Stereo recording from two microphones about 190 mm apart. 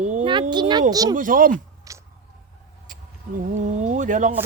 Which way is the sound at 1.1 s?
45° right (ahead or behind).